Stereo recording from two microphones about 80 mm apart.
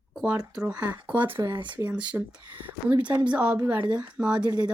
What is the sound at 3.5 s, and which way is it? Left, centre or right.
Speech, right.